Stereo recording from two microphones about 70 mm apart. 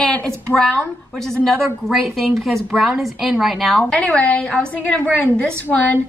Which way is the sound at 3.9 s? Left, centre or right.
Centre.